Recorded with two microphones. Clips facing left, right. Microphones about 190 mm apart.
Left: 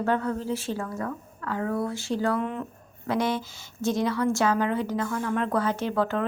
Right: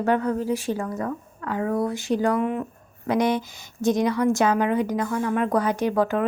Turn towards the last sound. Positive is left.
turn(degrees=-10)  # may be behind; listen again after turning